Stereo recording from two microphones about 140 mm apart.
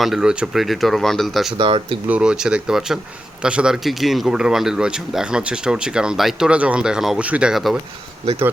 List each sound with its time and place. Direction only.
0.0 s speech: 5° right (ahead or behind)
1.5 s speech: 40° right (ahead or behind)
2.0 s speech: 5° right (ahead or behind)